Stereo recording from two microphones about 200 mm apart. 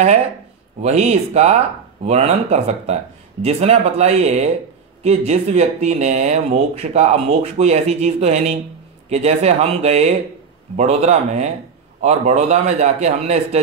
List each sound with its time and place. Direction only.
0.8 s speech: 35° right (ahead or behind)